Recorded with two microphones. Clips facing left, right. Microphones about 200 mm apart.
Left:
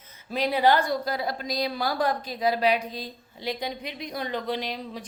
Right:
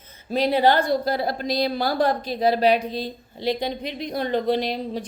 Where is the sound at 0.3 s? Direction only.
30° right (ahead or behind).